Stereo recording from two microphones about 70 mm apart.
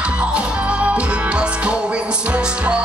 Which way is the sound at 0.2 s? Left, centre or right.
Centre.